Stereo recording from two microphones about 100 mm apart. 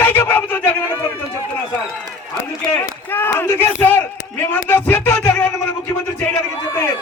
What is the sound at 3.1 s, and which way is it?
A man's voice, 20° left (ahead or behind).